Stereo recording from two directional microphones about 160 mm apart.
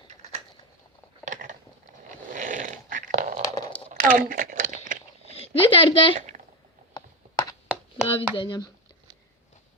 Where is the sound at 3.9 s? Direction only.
55° right (ahead or behind).